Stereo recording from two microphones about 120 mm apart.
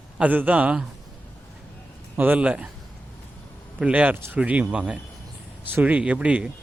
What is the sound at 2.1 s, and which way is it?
Speech, 15° right (ahead or behind).